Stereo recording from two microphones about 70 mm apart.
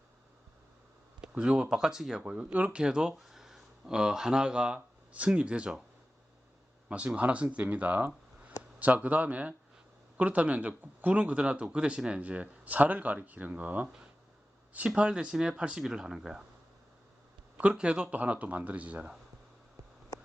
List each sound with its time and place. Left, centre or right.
1.3 s speech: centre
6.8 s speech: centre
17.6 s speech: centre